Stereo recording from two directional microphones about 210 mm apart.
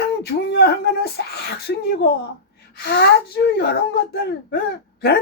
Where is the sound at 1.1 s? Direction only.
50° left (ahead or behind).